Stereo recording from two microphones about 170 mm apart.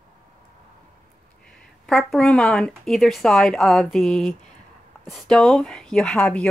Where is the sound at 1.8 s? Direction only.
Centre (ahead or behind).